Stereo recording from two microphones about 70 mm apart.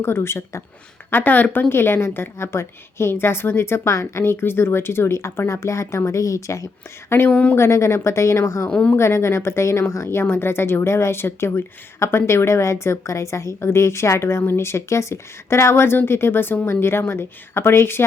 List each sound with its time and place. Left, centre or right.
0.0 s a woman's voice: left
7.3 s a woman's voice: centre
7.5 s a woman's voice: left
8.7 s a woman's voice: centre
9.0 s a woman's voice: left